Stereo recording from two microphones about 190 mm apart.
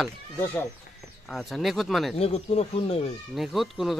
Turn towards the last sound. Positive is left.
turn(degrees=0)  # may be behind; listen again after turning